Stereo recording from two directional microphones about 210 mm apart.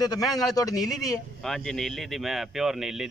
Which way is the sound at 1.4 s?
5° left (ahead or behind).